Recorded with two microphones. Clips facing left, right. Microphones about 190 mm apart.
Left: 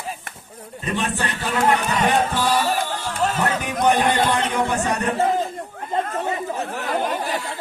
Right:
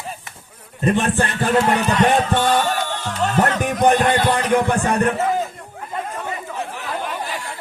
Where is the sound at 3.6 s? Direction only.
50° right (ahead or behind).